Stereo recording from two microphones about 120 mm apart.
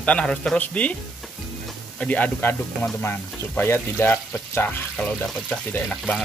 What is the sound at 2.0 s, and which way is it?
Speech, 10° left (ahead or behind).